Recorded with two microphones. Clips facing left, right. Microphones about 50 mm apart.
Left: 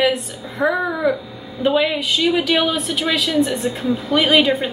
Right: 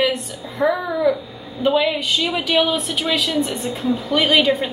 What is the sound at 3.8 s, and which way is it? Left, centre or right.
Speech, centre.